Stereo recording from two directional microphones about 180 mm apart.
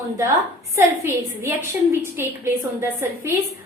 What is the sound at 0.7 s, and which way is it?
A woman's voice, 15° right (ahead or behind).